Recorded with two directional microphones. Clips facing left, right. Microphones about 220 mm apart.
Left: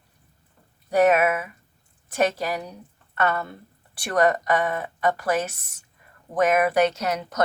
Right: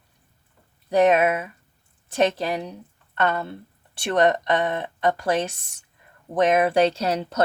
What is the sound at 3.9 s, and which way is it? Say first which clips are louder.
Speech: right 1 dB; 25° right (ahead or behind).